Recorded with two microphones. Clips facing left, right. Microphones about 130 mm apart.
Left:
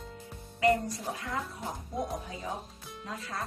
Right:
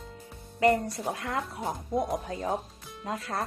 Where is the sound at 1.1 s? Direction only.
70° right (ahead or behind).